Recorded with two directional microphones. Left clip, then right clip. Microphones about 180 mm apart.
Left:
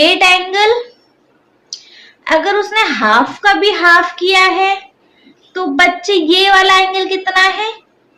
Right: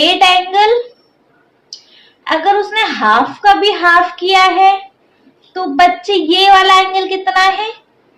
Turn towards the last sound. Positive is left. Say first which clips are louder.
# even
turn(degrees=25)  # may be behind; listen again after turning